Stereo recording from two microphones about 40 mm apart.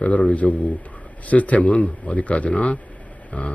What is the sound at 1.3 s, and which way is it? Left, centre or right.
A man's voice, left.